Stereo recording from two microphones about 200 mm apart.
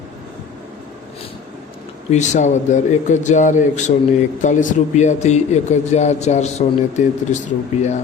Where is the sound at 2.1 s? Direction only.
35° left (ahead or behind).